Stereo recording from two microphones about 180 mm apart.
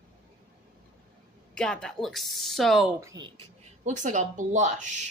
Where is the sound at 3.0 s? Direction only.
20° right (ahead or behind).